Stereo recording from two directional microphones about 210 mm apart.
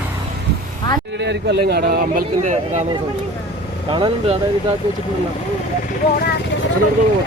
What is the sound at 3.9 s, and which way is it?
Speech, 25° right (ahead or behind).